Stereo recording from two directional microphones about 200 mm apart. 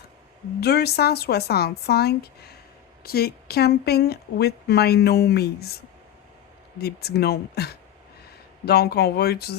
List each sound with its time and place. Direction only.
0.6 s a woman's voice: 55° left (ahead or behind)